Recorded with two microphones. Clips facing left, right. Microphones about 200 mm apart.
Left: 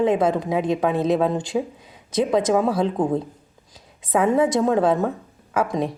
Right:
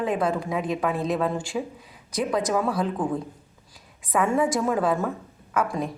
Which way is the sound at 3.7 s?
25° left (ahead or behind).